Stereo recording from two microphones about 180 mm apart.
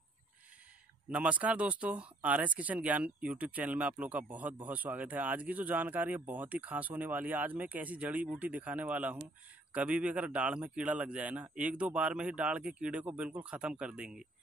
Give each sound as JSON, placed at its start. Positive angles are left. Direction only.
{"t": 1.1, "sound": "speech", "side_deg": -5}